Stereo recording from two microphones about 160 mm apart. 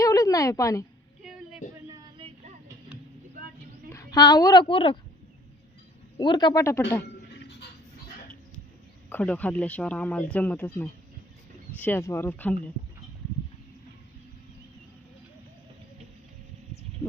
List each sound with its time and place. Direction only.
0.0 s a sound: 20° left (ahead or behind)
3.8 s a woman's voice: 20° left (ahead or behind)
6.1 s speech: 25° left (ahead or behind)
9.0 s speech: 10° left (ahead or behind)